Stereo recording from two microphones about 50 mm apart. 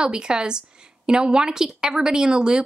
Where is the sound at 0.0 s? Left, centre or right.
Centre.